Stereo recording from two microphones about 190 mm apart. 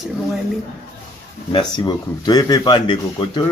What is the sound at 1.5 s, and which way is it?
Speech, 25° left (ahead or behind).